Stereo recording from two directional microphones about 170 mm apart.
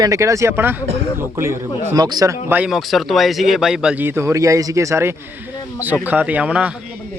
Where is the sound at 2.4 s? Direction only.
10° right (ahead or behind).